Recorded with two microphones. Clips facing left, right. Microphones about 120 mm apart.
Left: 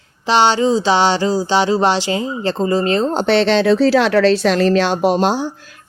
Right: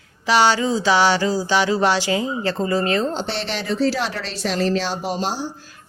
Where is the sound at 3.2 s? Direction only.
65° left (ahead or behind).